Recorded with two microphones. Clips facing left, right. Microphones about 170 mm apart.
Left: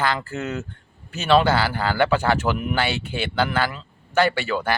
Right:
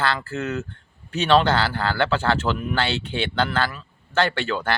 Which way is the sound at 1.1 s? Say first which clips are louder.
Even; 5° left (ahead or behind).